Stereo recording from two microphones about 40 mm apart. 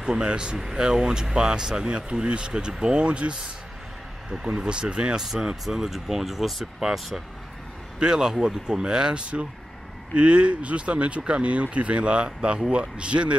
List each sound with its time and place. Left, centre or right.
0.0 s speech: right
0.6 s speech: centre; by 3.3 s right
4.6 s speech: right
5.2 s speech: centre
8.0 s speech: centre